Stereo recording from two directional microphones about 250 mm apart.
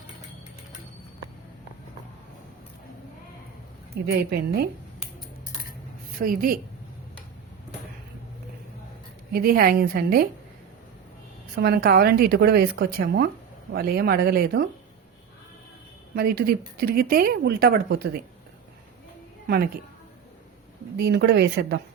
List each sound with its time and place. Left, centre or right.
4.0 s speech: right
6.1 s speech: right
9.3 s speech: right
11.5 s speech: right
16.1 s speech: right
19.5 s speech: right
21.0 s speech: right